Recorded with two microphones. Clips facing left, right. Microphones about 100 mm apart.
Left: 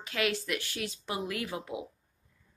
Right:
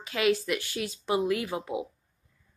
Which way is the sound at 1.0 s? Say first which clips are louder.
Right 10 dB; 15° right (ahead or behind).